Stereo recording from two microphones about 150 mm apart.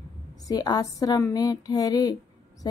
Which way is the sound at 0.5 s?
25° left (ahead or behind).